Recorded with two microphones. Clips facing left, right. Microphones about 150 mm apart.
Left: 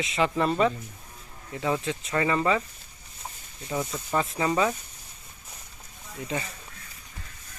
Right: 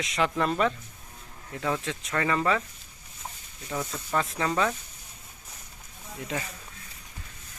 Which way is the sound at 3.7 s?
5° left (ahead or behind).